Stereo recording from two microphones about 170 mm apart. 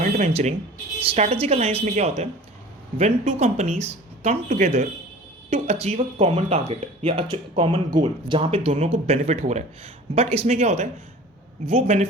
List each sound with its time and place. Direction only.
0.0 s speech: 40° right (ahead or behind)